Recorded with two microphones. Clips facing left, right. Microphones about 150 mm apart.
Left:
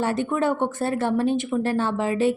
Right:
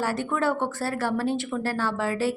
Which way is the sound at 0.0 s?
20° left (ahead or behind).